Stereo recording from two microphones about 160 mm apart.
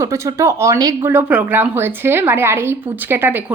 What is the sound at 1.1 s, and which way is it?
A woman's voice, 10° right (ahead or behind).